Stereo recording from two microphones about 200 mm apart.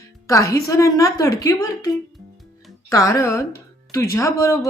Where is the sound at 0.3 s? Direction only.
15° left (ahead or behind).